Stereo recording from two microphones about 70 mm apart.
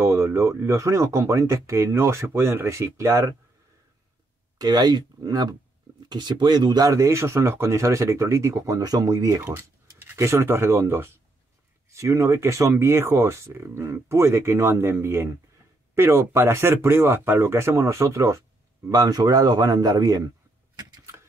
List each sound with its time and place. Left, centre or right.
0.0 s speech: right
4.6 s a man's voice: right
6.0 s speech: right
6.9 s speech: right
10.1 s speech: right
18.9 s a man's voice: right
20.7 s a sound: right